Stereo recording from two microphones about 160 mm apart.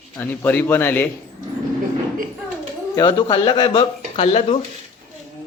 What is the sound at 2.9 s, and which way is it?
Speech, 30° left (ahead or behind).